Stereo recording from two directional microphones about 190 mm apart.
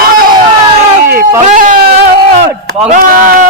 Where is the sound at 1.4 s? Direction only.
50° right (ahead or behind).